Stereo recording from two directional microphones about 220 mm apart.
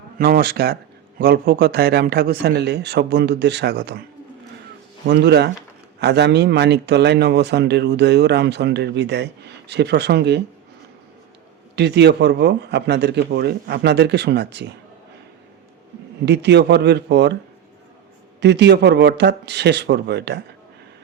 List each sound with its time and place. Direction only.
0.2 s a man's voice: 40° right (ahead or behind)
5.0 s a man's voice: 50° right (ahead or behind)
11.8 s a man's voice: 50° right (ahead or behind)
16.2 s a man's voice: 50° right (ahead or behind)
18.3 s a man's voice: 50° right (ahead or behind)